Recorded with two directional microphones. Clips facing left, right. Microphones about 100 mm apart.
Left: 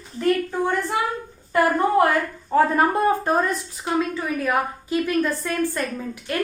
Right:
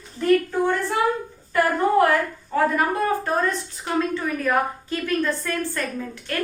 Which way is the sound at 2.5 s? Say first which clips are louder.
Left 3 dB; 25° left (ahead or behind).